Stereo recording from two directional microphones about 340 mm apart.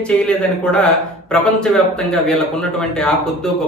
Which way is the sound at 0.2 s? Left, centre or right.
Centre.